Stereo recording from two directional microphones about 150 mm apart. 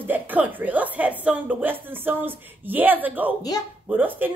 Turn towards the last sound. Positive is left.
turn(degrees=-10)  # may be behind; listen again after turning